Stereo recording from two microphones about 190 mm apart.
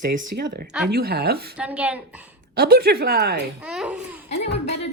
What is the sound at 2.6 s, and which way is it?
Speech, 55° right (ahead or behind).